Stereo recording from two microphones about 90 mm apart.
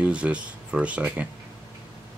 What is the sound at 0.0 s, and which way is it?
Speech, 15° right (ahead or behind).